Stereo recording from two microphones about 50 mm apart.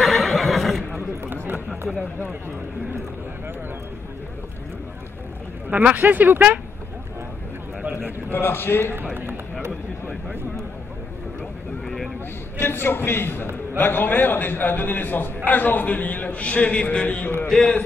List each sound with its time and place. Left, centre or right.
0.0 s neigh: centre
0.9 s a sound: right
5.7 s speech: right
8.3 s a man's voice: left
8.9 s run: right
11.8 s a sound: centre
12.5 s a man's voice: left
17.5 s a man's voice: centre